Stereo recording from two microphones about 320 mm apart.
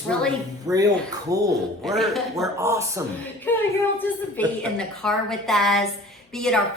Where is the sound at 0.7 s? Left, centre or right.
Centre.